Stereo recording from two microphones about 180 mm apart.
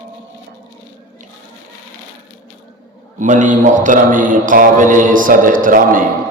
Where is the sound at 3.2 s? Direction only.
45° right (ahead or behind).